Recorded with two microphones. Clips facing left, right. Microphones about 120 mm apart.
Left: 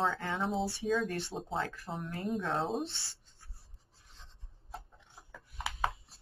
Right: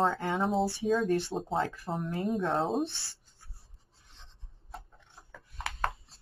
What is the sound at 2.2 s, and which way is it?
Speech, centre (ahead or behind).